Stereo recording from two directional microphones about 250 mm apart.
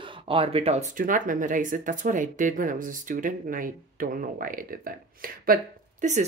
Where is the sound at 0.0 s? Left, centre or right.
Right.